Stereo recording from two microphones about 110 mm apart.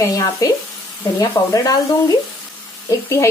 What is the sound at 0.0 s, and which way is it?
A woman's voice, 30° left (ahead or behind).